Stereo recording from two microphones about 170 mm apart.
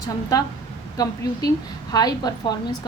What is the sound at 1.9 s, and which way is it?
Speech, 25° left (ahead or behind).